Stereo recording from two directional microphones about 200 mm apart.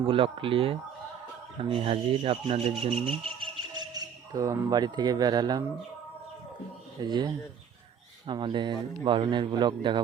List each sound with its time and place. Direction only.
0.1 s speech: 25° right (ahead or behind)
7.0 s speech: 20° right (ahead or behind)